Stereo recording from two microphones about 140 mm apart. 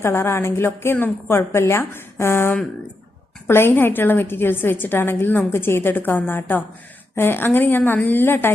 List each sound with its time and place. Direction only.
0.0 s a woman's voice: 20° left (ahead or behind)